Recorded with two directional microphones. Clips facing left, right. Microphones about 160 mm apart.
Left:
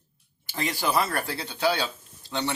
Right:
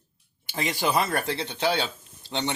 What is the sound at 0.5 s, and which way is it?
Speech, 20° right (ahead or behind).